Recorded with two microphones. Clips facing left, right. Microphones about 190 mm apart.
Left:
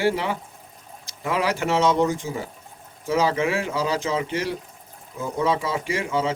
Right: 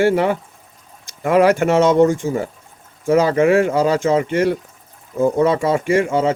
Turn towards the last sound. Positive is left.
turn(degrees=-50)  # may be behind; listen again after turning